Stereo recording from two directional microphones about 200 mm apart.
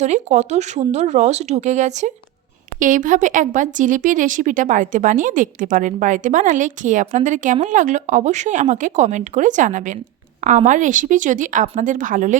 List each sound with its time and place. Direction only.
0.0 s speech: 35° right (ahead or behind)